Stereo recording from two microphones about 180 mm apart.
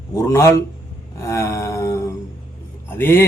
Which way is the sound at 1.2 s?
15° left (ahead or behind).